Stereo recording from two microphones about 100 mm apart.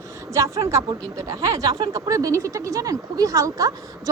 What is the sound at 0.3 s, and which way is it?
A woman's voice, 30° right (ahead or behind).